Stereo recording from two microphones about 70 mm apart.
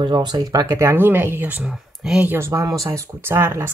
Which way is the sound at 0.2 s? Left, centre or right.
Right.